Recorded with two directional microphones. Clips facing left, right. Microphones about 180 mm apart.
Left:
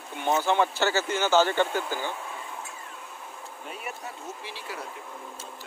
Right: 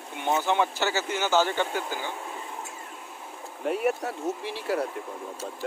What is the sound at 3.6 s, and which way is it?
Speech, 60° right (ahead or behind).